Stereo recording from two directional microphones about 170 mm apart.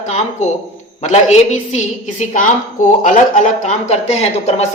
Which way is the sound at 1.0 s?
45° left (ahead or behind).